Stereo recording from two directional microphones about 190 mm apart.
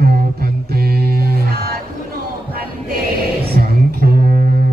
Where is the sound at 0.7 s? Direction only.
55° right (ahead or behind).